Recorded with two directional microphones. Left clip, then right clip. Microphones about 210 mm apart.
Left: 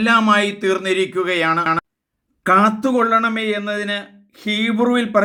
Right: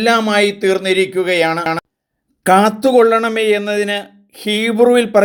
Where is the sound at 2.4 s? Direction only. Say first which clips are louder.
Right 3 dB; 15° right (ahead or behind).